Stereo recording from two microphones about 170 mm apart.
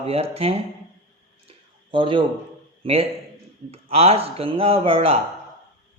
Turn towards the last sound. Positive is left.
turn(degrees=-35)  # may be behind; listen again after turning